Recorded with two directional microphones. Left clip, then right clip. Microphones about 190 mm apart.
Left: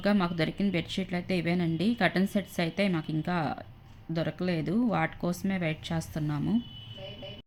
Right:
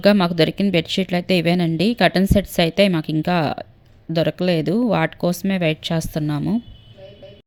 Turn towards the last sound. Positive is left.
turn(degrees=-45)  # may be behind; listen again after turning